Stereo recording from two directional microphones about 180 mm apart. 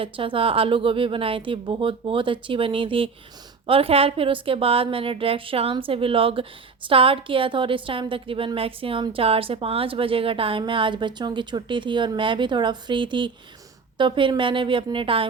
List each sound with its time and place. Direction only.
0.0 s a woman's voice: 30° right (ahead or behind)